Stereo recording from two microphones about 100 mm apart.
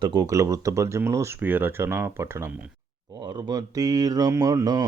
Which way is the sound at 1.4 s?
20° right (ahead or behind).